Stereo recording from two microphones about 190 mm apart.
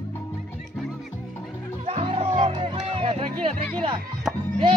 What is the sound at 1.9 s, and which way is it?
Music, 30° right (ahead or behind).